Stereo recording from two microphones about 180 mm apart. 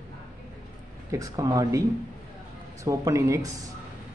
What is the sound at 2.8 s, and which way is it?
Speech, 15° right (ahead or behind).